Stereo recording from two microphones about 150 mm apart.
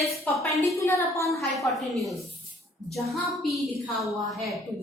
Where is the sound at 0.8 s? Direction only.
20° left (ahead or behind).